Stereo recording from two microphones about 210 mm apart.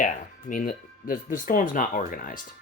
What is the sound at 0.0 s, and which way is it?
Speech, 40° left (ahead or behind).